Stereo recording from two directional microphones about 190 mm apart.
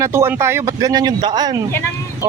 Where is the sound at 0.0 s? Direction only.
15° right (ahead or behind).